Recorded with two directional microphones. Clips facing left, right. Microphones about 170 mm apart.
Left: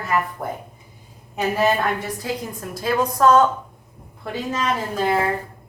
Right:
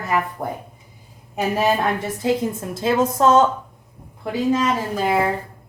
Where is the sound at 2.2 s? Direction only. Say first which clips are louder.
Right 7 dB; 25° right (ahead or behind).